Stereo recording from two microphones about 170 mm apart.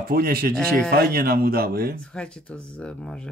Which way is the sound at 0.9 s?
65° right (ahead or behind).